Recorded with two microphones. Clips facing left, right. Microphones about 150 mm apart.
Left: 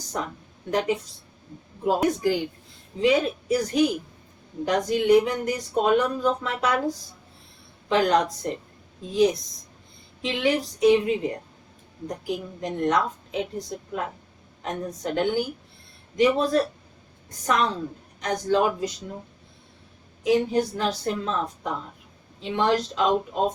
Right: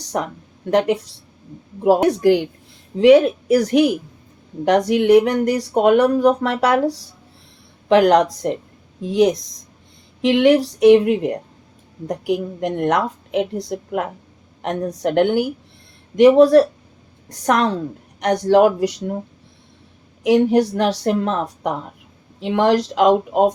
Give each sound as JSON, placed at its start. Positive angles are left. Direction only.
{"t": 0.1, "sound": "a woman's voice", "side_deg": -65}
{"t": 20.2, "sound": "speech", "side_deg": -80}